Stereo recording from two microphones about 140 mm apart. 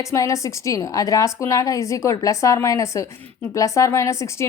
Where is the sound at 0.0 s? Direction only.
20° left (ahead or behind).